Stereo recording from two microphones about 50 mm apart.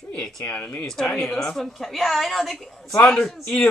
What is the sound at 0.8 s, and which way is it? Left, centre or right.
Speech, centre.